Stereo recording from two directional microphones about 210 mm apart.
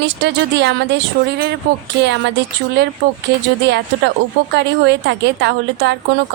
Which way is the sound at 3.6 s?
55° right (ahead or behind).